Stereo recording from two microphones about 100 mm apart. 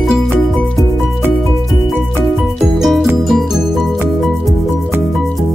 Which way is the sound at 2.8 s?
Centre (ahead or behind).